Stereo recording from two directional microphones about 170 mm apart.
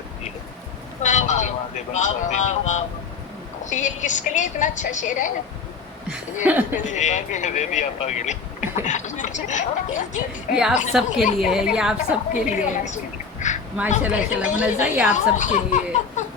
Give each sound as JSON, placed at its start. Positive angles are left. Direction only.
{"t": 1.0, "sound": "speech", "side_deg": 45}
{"t": 6.4, "sound": "a woman's voice", "side_deg": -10}
{"t": 6.7, "sound": "speech", "side_deg": 45}
{"t": 10.5, "sound": "a woman's voice", "side_deg": -5}
{"t": 12.3, "sound": "speech", "side_deg": 45}
{"t": 13.5, "sound": "duck", "side_deg": 45}
{"t": 14.0, "sound": "a woman's voice", "side_deg": -10}
{"t": 15.1, "sound": "speech", "side_deg": 45}